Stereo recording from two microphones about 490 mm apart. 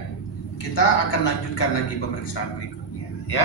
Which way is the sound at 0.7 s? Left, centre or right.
Left.